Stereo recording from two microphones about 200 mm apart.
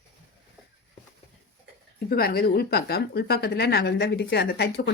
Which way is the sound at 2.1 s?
50° left (ahead or behind).